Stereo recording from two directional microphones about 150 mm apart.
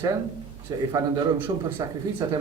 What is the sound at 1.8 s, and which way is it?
Speech, 25° right (ahead or behind).